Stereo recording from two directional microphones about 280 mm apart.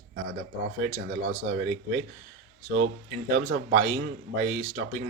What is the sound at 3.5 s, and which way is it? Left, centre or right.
Speech, right.